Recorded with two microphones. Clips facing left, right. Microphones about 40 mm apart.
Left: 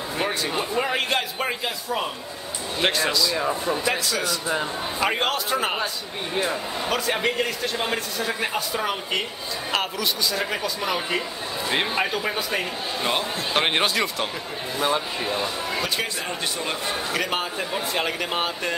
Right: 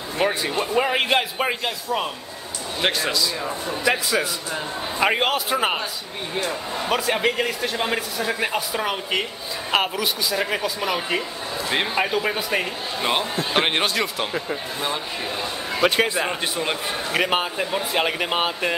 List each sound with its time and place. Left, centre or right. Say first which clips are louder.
0.2 s a man's voice: right 4 dB; centre
1.6 s a man's voice: right 2 dB; centre
3.3 s speech: left 3 dB; centre
3.8 s a man's voice: right 3 dB; centre
6.3 s speech: even; centre
6.9 s a man's voice: right 3 dB; centre
15.8 s speech: right 12 dB; right
16.3 s a man's voice: right 3 dB; right